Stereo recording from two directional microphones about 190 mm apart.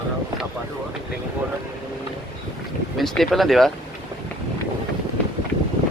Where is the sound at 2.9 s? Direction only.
Centre (ahead or behind).